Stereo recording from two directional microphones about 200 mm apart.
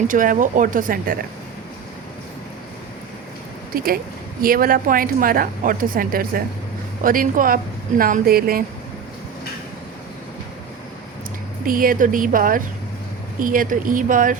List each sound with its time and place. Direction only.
0.1 s a woman's voice: 40° right (ahead or behind)
3.7 s a woman's voice: 45° right (ahead or behind)
11.6 s a woman's voice: 45° right (ahead or behind)